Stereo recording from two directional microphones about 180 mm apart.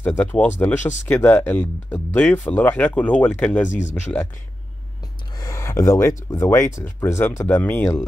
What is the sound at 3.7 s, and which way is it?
Speech, 40° left (ahead or behind).